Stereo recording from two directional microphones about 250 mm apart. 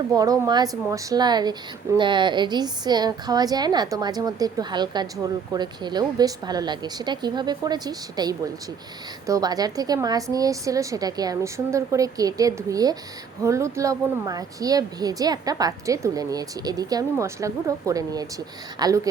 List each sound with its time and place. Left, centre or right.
0.1 s a woman's voice: centre